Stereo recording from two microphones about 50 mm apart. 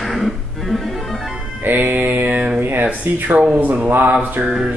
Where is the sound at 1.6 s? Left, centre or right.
Right.